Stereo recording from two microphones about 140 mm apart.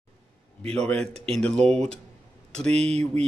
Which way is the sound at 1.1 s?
45° right (ahead or behind).